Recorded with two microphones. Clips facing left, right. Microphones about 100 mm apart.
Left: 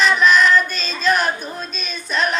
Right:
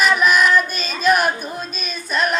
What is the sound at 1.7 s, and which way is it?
Child singing, 5° right (ahead or behind).